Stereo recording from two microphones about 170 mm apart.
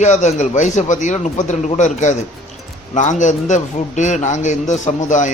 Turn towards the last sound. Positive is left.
turn(degrees=45)  # may be behind; listen again after turning